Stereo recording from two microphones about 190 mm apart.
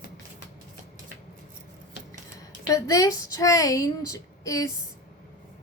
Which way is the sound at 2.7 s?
15° left (ahead or behind).